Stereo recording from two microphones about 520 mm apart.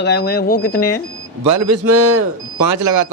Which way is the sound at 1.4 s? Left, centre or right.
Right.